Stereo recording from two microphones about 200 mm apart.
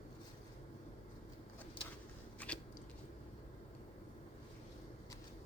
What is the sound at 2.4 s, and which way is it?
Biting, 5° left (ahead or behind).